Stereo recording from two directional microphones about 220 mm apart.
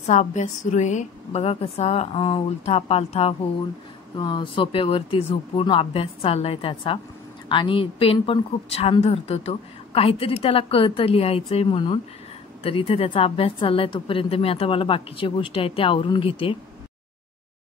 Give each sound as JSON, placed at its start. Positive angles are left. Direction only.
{"t": 0.0, "sound": "a woman's voice", "side_deg": 30}